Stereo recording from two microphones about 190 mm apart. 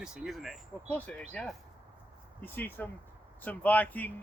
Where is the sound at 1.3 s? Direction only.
5° left (ahead or behind).